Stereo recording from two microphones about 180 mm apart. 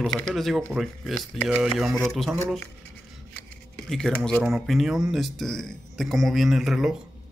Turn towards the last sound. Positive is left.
turn(degrees=0)  # may be behind; listen again after turning